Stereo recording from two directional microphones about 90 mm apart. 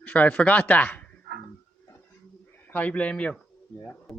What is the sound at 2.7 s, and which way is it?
Speech, 15° left (ahead or behind).